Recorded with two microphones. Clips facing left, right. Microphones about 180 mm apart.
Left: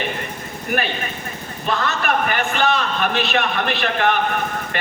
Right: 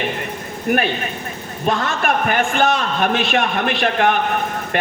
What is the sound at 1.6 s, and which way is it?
Speech, 50° right (ahead or behind).